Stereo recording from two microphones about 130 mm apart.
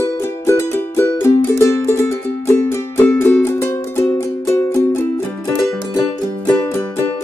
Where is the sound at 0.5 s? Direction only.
15° left (ahead or behind).